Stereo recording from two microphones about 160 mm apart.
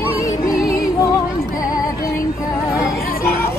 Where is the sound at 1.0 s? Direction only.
25° left (ahead or behind).